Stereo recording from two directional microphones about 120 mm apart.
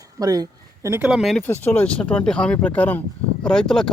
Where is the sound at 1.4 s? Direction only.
15° left (ahead or behind).